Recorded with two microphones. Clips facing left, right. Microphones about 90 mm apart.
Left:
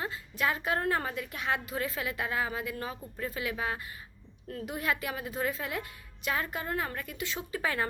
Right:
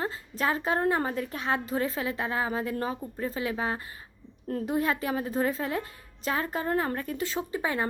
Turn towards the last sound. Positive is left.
turn(degrees=-25)  # may be behind; listen again after turning